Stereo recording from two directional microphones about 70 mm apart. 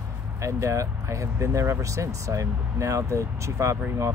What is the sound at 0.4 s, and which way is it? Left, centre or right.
Speech, right.